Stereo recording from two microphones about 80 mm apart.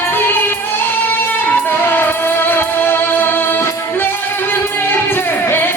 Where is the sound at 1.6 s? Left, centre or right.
Left.